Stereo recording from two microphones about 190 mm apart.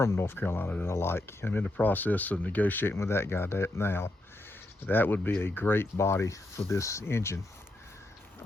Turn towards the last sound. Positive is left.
turn(degrees=15)  # may be behind; listen again after turning